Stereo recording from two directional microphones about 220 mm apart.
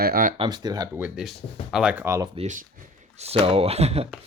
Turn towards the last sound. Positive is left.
turn(degrees=-25)  # may be behind; listen again after turning